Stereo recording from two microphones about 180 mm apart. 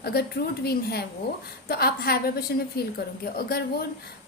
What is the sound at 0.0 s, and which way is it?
A woman's voice, 60° left (ahead or behind).